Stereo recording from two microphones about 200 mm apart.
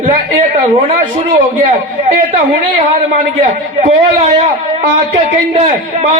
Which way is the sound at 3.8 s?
35° right (ahead or behind).